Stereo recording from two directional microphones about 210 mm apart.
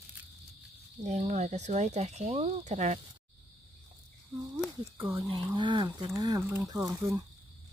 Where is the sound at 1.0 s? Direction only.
35° right (ahead or behind).